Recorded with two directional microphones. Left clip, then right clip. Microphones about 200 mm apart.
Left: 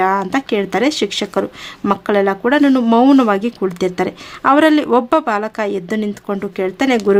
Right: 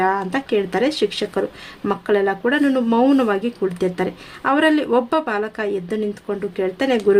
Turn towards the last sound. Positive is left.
turn(degrees=35)  # may be behind; listen again after turning